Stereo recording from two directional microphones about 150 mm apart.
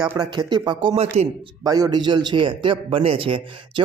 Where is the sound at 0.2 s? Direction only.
30° right (ahead or behind).